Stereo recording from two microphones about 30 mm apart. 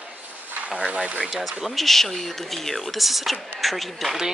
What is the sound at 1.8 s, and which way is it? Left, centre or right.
Speech, centre.